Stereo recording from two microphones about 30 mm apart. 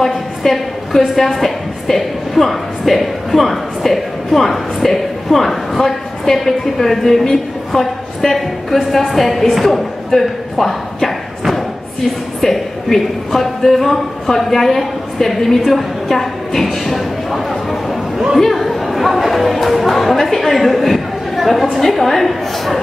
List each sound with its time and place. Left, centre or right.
0.0 s a woman's voice: centre
10.6 s a sound: centre
12.4 s a woman's voice: centre
16.9 s a sound: centre
18.1 s chatter: centre
18.4 s speech: centre